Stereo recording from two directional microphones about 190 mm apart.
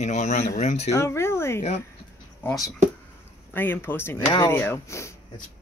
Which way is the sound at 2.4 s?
Centre (ahead or behind).